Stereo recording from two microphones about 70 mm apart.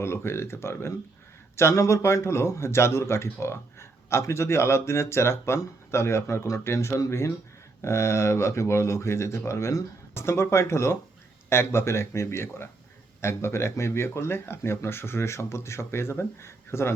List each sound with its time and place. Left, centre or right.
0.0 s speech: left